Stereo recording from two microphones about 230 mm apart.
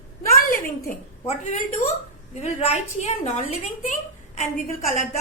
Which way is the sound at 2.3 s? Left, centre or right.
Left.